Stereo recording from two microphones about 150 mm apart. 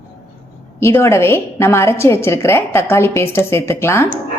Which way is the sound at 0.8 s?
15° left (ahead or behind).